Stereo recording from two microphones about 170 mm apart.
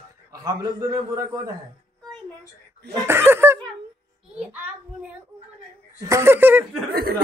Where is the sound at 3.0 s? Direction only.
15° right (ahead or behind).